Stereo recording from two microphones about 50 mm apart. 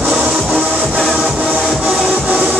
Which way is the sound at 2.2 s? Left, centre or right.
Right.